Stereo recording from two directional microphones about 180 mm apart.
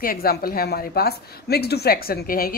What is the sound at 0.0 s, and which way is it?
A woman's voice, 55° left (ahead or behind).